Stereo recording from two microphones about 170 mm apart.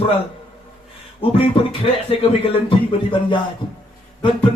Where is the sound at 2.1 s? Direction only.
30° left (ahead or behind).